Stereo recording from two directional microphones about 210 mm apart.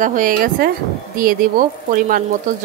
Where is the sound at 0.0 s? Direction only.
40° right (ahead or behind).